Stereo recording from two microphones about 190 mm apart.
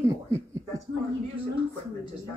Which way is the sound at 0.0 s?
15° right (ahead or behind).